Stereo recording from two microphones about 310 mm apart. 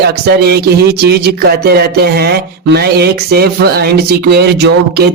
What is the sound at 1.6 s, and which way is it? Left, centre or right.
Speech, right.